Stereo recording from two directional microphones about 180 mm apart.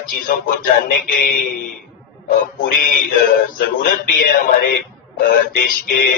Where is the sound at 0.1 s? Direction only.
55° left (ahead or behind).